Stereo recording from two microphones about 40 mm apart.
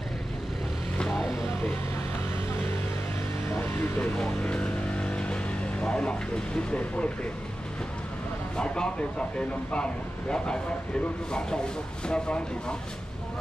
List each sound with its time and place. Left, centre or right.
4.4 s vehicle: left
8.5 s speech: left
10.3 s speech: left
12.1 s speech: left